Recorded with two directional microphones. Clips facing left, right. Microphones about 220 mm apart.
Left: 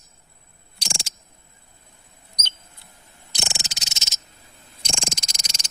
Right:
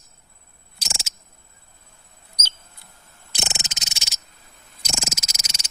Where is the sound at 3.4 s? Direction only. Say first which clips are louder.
Right 1 dB; 20° right (ahead or behind).